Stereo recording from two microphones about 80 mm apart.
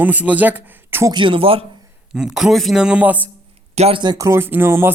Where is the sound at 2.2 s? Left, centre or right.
Centre.